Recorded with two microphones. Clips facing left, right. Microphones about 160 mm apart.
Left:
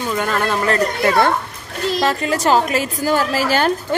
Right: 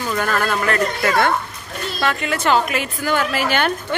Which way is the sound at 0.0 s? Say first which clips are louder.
Left 1 dB; 20° left (ahead or behind).